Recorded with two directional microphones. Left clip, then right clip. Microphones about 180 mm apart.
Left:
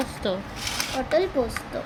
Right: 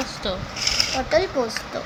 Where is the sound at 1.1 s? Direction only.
10° right (ahead or behind).